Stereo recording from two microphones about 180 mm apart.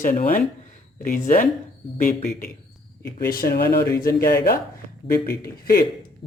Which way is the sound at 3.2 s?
55° left (ahead or behind).